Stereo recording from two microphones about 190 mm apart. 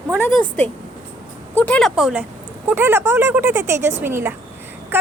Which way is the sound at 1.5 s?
10° left (ahead or behind).